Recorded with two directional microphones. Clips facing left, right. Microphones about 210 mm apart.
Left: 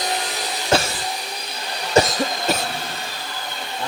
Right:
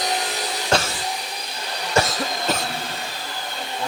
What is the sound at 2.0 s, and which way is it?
Cough, 20° left (ahead or behind).